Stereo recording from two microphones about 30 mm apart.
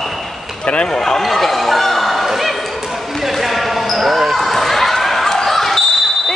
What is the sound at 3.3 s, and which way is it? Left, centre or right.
Basketball bounce, centre.